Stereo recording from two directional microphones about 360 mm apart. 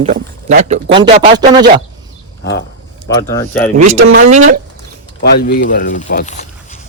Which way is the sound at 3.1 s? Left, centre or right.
Centre.